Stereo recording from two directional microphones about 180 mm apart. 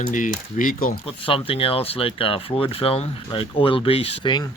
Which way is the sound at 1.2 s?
30° left (ahead or behind).